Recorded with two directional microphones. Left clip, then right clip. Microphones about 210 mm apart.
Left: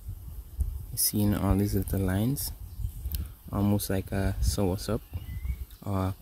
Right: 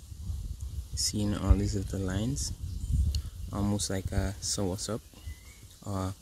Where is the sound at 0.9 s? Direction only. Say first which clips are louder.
Left 2 dB; 40° left (ahead or behind).